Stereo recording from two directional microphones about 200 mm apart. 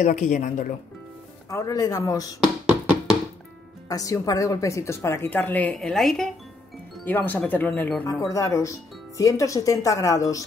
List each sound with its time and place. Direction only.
0.0 s speech: 40° left (ahead or behind)
1.5 s speech: 15° left (ahead or behind)
3.9 s speech: 15° left (ahead or behind)